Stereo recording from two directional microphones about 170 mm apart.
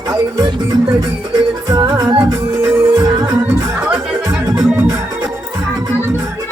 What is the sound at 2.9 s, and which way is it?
Music, 25° right (ahead or behind).